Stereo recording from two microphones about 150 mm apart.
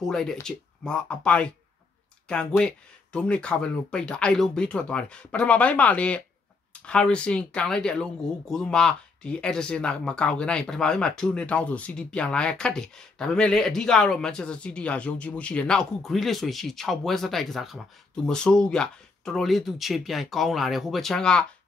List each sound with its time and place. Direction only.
0.0 s speech: 5° left (ahead or behind)